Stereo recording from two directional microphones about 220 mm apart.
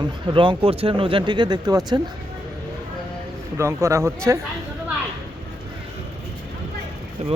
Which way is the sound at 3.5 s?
10° right (ahead or behind).